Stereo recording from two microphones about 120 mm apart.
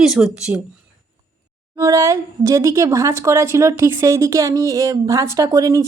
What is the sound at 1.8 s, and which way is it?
Speech, 25° right (ahead or behind).